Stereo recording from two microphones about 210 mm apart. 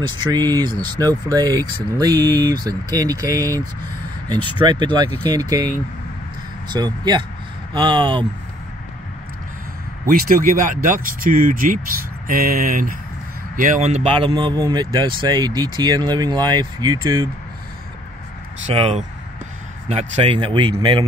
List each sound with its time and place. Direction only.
0.3 s speech: 20° right (ahead or behind)
6.7 s speech: 20° right (ahead or behind)
10.0 s speech: 40° right (ahead or behind); by 17.3 s 15° right (ahead or behind)
18.7 s speech: 30° right (ahead or behind)